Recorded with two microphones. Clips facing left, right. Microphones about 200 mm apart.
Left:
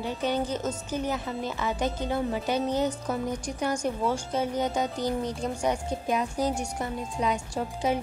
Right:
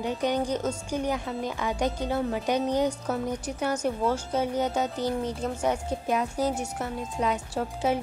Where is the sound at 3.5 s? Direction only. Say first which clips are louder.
Right 1 dB; 5° right (ahead or behind).